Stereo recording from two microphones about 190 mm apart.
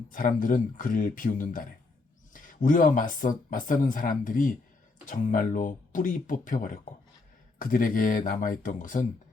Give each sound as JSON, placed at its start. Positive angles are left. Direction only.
{"t": 0.1, "sound": "speech", "side_deg": 45}